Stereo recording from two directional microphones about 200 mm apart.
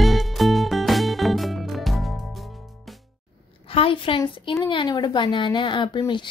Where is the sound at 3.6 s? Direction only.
30° left (ahead or behind).